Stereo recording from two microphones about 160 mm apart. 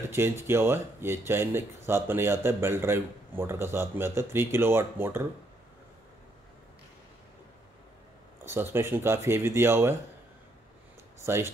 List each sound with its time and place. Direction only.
0.1 s speech: 15° right (ahead or behind)
8.5 s speech: 15° right (ahead or behind)
11.2 s speech: 15° right (ahead or behind)